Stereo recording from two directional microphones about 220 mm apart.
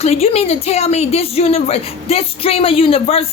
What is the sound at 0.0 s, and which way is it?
A woman's voice, 30° left (ahead or behind).